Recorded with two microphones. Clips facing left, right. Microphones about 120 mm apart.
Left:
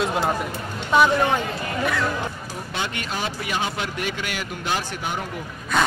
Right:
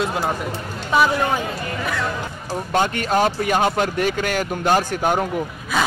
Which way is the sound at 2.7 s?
50° right (ahead or behind).